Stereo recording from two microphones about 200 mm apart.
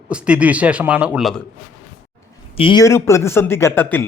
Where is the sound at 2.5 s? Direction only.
25° left (ahead or behind).